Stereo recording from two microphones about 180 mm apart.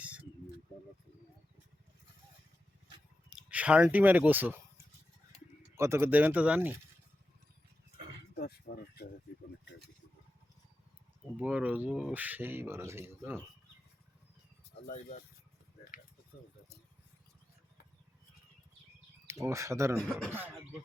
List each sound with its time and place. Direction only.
3.2 s speech: 5° right (ahead or behind)
5.7 s speech: 15° right (ahead or behind)
8.4 s speech: 60° left (ahead or behind)
11.3 s speech: 10° right (ahead or behind)
19.3 s speech: 15° right (ahead or behind)
20.0 s speech: 5° left (ahead or behind)